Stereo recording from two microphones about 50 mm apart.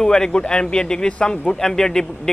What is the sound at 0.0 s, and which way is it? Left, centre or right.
Speech, centre.